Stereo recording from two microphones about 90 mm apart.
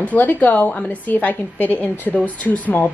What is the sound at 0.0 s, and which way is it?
A woman's voice, 20° left (ahead or behind).